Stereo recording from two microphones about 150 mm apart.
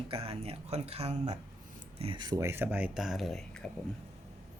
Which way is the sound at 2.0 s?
30° right (ahead or behind).